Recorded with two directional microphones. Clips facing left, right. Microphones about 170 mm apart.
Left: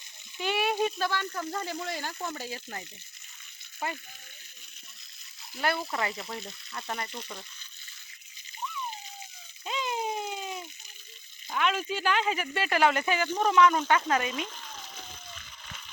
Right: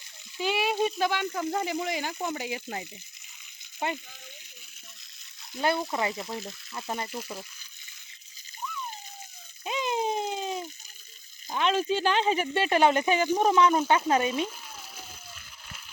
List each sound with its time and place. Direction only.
0.3 s frying: 10° right (ahead or behind)
0.9 s speech: 15° right (ahead or behind)
3.8 s frying: 20° right (ahead or behind)
5.9 s speech: 25° right (ahead or behind)
6.1 s speech: centre (ahead or behind)
9.6 s a sound: 20° right (ahead or behind)
11.4 s speech: 30° right (ahead or behind)
14.4 s a sound: 10° right (ahead or behind)